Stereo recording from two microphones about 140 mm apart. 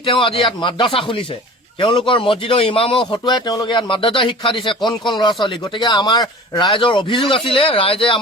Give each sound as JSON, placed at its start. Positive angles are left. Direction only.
{"t": 0.0, "sound": "speech", "side_deg": 40}